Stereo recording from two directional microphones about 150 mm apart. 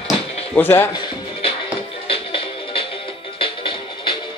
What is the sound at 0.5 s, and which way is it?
Speech, 15° left (ahead or behind).